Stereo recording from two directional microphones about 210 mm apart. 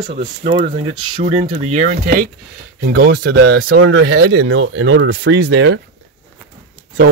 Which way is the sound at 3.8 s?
60° right (ahead or behind).